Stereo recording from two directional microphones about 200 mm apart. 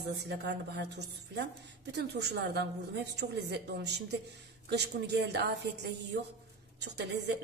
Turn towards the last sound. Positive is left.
turn(degrees=-60)  # may be behind; listen again after turning